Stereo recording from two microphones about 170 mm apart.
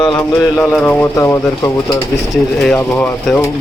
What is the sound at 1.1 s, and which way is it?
Speech, 20° left (ahead or behind).